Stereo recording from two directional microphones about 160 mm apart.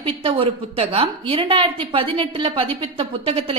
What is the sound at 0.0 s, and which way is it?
A woman's voice, 35° right (ahead or behind).